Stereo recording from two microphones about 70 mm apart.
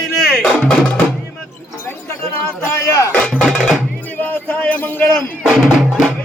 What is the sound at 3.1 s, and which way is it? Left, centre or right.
Music, centre.